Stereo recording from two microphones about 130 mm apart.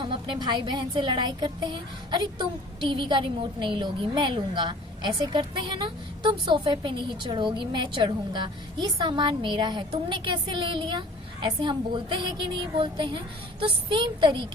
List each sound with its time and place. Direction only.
0.0 s a woman's voice: 40° right (ahead or behind)